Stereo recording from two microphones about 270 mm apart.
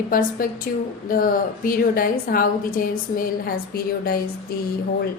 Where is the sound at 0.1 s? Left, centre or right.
Left.